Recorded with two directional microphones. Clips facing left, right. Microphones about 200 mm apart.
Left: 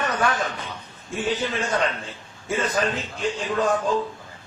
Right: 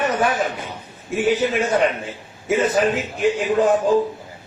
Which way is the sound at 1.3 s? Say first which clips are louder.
Right 6 dB; 10° right (ahead or behind).